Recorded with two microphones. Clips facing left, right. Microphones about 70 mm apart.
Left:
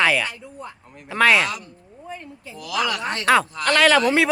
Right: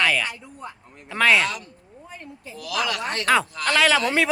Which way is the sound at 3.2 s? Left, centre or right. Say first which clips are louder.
Left 3 dB; centre.